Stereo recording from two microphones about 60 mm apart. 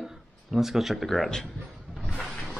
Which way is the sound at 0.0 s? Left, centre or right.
Centre.